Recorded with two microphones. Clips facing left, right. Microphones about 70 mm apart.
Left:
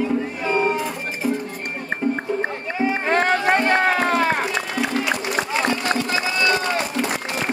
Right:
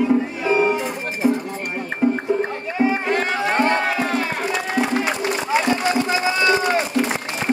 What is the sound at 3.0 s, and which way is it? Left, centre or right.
Music, left.